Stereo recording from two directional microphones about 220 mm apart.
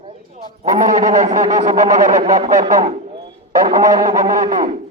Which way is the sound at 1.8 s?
15° right (ahead or behind).